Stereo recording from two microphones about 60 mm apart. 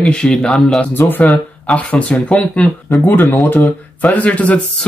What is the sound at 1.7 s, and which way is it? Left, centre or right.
Speech, left.